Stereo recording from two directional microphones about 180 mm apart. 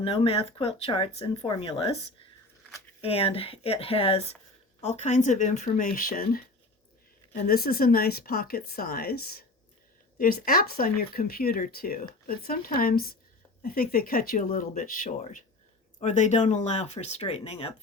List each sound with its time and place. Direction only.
0.0 s speech: 30° left (ahead or behind)
3.0 s speech: 30° left (ahead or behind); by 6.4 s 50° left (ahead or behind)
7.4 s speech: 55° left (ahead or behind); by 17.7 s 35° left (ahead or behind)